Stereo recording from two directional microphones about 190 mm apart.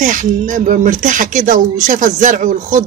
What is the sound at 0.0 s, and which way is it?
A woman's voice, 45° right (ahead or behind).